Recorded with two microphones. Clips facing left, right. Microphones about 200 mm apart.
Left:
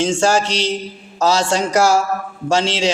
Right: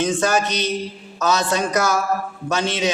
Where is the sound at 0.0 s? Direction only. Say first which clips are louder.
Left 3 dB; 30° left (ahead or behind).